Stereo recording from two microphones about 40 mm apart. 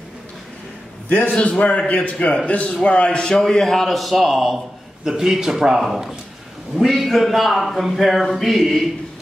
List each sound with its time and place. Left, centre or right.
1.0 s a man's voice: left
3.3 s speech: centre
5.0 s a man's voice: centre